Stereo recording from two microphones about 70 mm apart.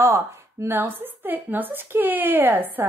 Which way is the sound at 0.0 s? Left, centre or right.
Right.